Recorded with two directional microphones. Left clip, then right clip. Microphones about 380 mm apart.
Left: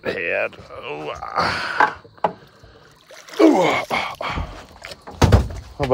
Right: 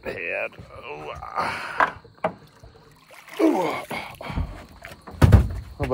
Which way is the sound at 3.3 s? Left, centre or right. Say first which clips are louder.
Left 7 dB; left.